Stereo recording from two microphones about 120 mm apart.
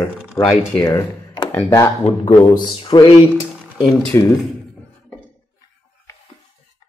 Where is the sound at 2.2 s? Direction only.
40° left (ahead or behind).